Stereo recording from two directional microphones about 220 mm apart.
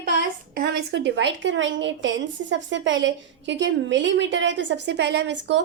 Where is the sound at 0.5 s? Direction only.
50° right (ahead or behind).